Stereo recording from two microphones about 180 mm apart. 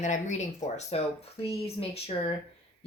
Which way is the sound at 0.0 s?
40° left (ahead or behind).